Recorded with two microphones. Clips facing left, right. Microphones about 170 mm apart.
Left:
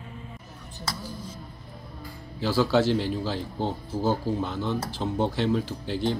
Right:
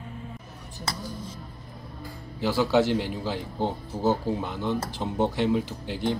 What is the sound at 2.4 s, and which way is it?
A man's voice, 15° right (ahead or behind).